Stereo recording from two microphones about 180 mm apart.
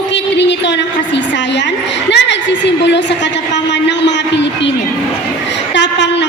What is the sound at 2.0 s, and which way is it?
Speech, 75° left (ahead or behind).